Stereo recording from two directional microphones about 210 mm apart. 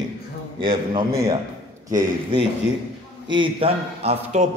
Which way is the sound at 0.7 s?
20° right (ahead or behind).